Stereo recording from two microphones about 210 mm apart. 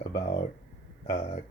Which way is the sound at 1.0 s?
25° left (ahead or behind).